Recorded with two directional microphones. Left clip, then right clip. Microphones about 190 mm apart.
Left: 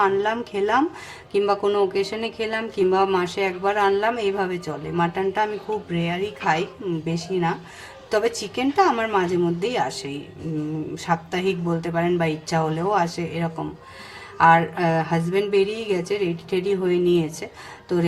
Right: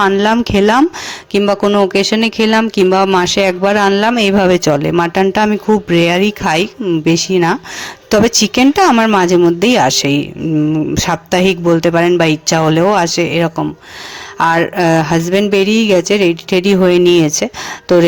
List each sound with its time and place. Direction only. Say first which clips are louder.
0.0 s a woman's voice: right 9 dB; 45° right (ahead or behind)